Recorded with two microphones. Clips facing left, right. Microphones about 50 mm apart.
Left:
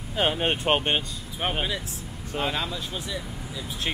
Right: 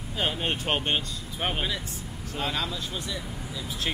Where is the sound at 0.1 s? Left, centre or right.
Left.